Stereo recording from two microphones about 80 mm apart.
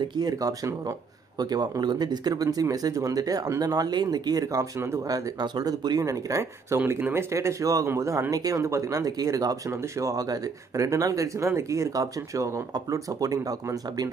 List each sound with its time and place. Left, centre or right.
0.1 s speech: right
6.9 s speech: right
7.3 s speech: right